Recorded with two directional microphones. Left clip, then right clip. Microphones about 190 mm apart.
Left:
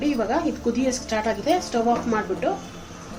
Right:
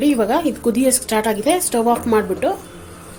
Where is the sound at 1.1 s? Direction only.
55° right (ahead or behind).